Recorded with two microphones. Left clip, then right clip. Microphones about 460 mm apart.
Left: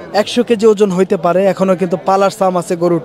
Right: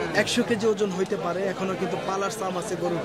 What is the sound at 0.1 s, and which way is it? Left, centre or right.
Speech, left.